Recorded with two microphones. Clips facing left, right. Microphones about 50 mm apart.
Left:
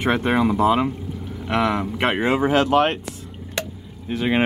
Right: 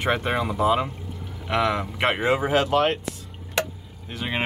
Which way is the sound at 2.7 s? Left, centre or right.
Centre.